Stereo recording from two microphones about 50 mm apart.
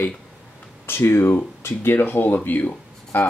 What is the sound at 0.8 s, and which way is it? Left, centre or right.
Speech, left.